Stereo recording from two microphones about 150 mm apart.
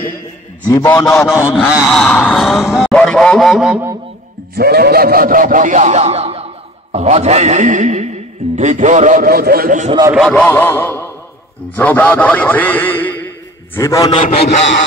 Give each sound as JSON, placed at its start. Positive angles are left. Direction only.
{"t": 0.7, "sound": "a man's voice", "side_deg": 25}
{"t": 1.0, "sound": "a sound", "side_deg": 0}
{"t": 4.6, "sound": "speech", "side_deg": -90}
{"t": 10.3, "sound": "a man's voice", "side_deg": 10}
{"t": 13.7, "sound": "a man's voice", "side_deg": 20}